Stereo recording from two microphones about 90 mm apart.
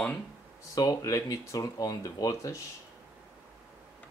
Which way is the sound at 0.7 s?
40° left (ahead or behind).